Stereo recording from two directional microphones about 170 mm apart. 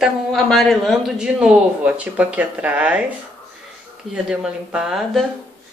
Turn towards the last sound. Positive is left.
turn(degrees=0)  # may be behind; listen again after turning